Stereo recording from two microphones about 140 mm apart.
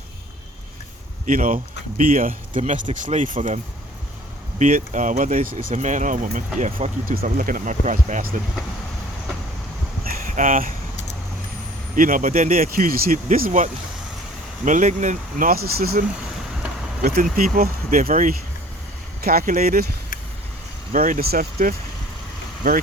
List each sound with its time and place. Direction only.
1.3 s speech: 70° right (ahead or behind)
7.1 s speech: 85° right
10.1 s a sound: 70° right (ahead or behind)
11.9 s speech: 75° right (ahead or behind)
12.5 s speech: 90° right
14.6 s speech: 65° right (ahead or behind); by 18.3 s 80° right
19.2 s speech: 90° right
20.9 s speech: 85° right